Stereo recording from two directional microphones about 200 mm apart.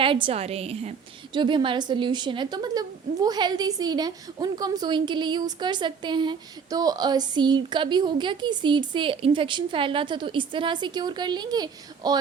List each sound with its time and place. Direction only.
0.0 s a woman's voice: 25° right (ahead or behind)